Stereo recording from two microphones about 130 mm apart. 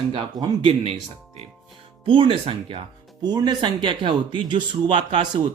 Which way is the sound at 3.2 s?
30° right (ahead or behind).